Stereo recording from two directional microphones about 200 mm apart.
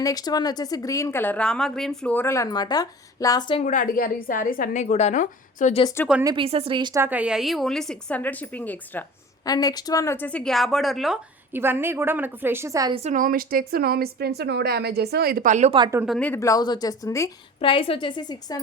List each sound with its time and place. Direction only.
0.0 s a woman's voice: 20° left (ahead or behind)
3.6 s a woman's voice: 40° left (ahead or behind)
6.2 s a woman's voice: 25° right (ahead or behind); by 9.0 s 10° left (ahead or behind)
9.5 s a woman's voice: 20° left (ahead or behind); by 12.9 s 15° right (ahead or behind)
12.9 s a woman's voice: 35° right (ahead or behind)
15.8 s speech: 15° right (ahead or behind)
16.0 s a woman's voice: 5° left (ahead or behind)
17.6 s a woman's voice: 25° left (ahead or behind)